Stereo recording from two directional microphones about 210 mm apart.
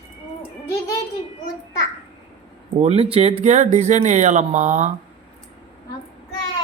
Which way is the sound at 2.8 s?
30° right (ahead or behind).